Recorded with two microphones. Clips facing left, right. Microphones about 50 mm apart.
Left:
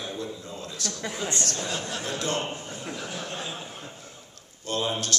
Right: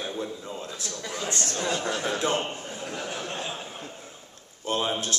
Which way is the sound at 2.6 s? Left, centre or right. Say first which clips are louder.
Right 1 dB; centre.